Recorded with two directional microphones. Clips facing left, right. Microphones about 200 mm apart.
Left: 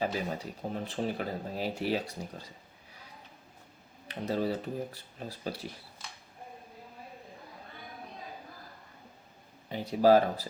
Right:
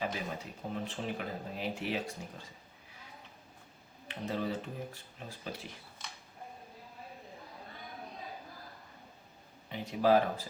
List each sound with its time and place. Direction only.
0.0 s speech: 35° left (ahead or behind)
4.1 s speech: 35° left (ahead or behind)
9.6 s speech: 35° left (ahead or behind)